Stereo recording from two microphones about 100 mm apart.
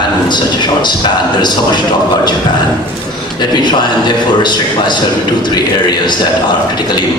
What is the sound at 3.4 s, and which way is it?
A man's voice, 50° left (ahead or behind).